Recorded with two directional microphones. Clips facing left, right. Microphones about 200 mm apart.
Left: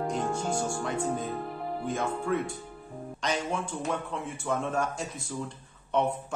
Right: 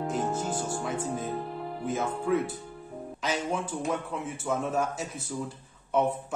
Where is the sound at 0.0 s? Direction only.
5° right (ahead or behind).